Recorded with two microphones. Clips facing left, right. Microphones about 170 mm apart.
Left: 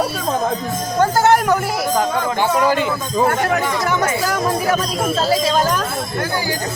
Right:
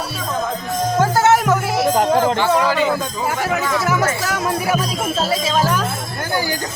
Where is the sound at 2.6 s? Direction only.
50° left (ahead or behind).